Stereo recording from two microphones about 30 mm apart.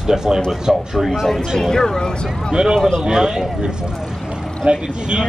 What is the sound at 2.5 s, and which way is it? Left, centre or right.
Speech, right.